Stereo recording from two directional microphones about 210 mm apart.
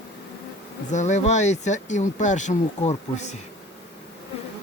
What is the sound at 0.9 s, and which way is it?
Speech, 35° left (ahead or behind).